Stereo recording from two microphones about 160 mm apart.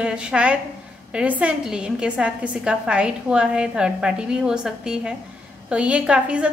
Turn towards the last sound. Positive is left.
turn(degrees=-5)  # may be behind; listen again after turning